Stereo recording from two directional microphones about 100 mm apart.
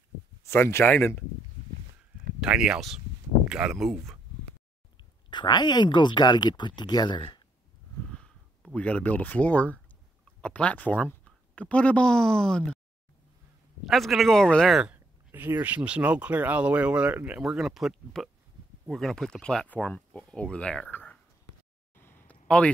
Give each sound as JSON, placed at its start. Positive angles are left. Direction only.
{"t": 0.4, "sound": "speech", "side_deg": 25}
{"t": 2.4, "sound": "speech", "side_deg": -10}
{"t": 5.3, "sound": "speech", "side_deg": 45}
{"t": 8.1, "sound": "speech", "side_deg": 10}
{"t": 13.8, "sound": "speech", "side_deg": 0}
{"t": 15.6, "sound": "speech", "side_deg": -15}
{"t": 17.4, "sound": "speech", "side_deg": -5}
{"t": 21.9, "sound": "a sound", "side_deg": 20}